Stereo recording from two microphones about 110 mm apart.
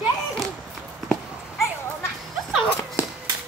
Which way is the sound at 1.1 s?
Centre (ahead or behind).